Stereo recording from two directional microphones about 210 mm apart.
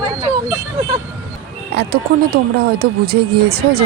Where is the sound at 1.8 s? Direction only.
50° right (ahead or behind).